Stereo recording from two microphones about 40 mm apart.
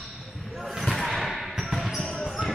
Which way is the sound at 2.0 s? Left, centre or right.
Left.